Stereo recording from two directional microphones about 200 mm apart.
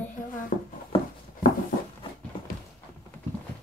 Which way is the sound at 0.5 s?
40° left (ahead or behind).